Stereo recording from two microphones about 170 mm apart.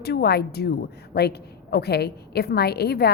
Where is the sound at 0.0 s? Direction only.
70° left (ahead or behind).